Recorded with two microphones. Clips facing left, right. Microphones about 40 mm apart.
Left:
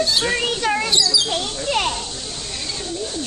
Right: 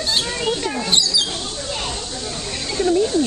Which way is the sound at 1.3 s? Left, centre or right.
Left.